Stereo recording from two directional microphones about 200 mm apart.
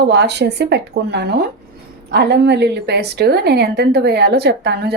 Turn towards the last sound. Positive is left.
turn(degrees=-55)  # may be behind; listen again after turning